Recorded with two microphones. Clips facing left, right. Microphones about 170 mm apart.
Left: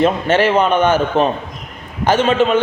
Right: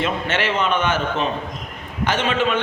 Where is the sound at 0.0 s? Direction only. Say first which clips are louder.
Left 9 dB; 40° left (ahead or behind).